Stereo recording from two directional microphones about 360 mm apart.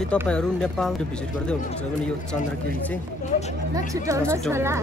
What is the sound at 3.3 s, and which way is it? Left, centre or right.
Speech, left.